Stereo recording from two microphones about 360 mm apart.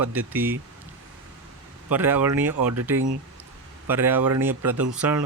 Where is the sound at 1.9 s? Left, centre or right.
Centre.